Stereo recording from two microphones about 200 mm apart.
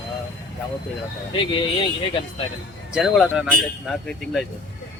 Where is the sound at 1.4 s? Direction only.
25° left (ahead or behind).